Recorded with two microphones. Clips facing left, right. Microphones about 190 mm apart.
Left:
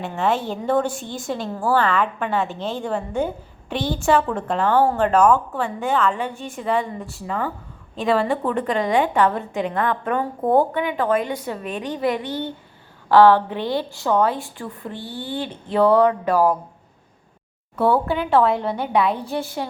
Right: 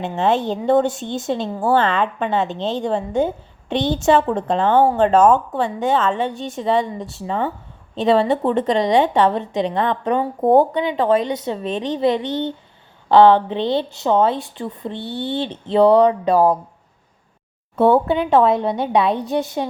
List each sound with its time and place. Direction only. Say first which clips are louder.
0.0 s a woman's voice: right 3 dB; 20° right (ahead or behind)
17.7 s a woman's voice: right 4 dB; 25° right (ahead or behind)